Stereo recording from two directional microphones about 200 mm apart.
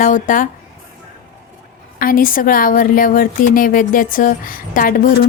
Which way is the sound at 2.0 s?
45° left (ahead or behind).